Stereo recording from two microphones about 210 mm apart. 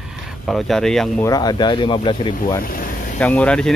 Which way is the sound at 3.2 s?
5° left (ahead or behind).